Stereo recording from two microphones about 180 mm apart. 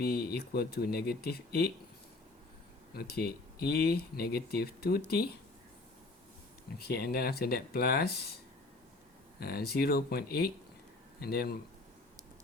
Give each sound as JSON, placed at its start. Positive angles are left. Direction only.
{"t": 0.0, "sound": "speech", "side_deg": 60}
{"t": 2.9, "sound": "speech", "side_deg": 60}
{"t": 6.7, "sound": "speech", "side_deg": 60}
{"t": 9.4, "sound": "speech", "side_deg": 60}